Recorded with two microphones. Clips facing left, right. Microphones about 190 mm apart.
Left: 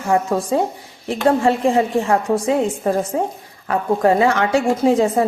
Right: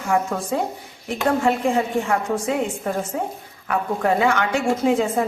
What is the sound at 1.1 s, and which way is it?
A woman's voice, 35° left (ahead or behind).